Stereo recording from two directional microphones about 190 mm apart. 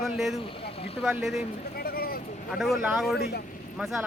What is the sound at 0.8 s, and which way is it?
Speech, 30° left (ahead or behind).